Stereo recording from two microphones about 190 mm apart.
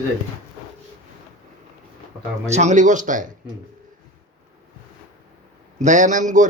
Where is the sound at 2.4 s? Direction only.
35° right (ahead or behind).